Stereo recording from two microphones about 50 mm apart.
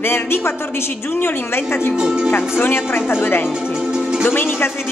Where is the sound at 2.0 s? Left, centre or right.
Centre.